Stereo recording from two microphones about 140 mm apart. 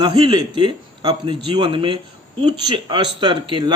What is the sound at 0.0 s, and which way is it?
Speech, 30° right (ahead or behind).